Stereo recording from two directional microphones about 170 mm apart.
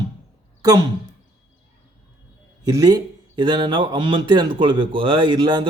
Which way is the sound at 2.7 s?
20° right (ahead or behind).